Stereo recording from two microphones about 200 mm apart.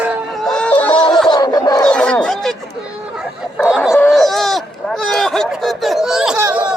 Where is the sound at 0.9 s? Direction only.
20° left (ahead or behind).